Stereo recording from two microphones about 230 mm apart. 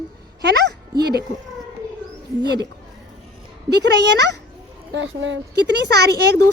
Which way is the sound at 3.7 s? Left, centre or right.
Right.